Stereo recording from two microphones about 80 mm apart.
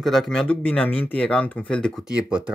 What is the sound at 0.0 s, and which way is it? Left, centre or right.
Speech, centre.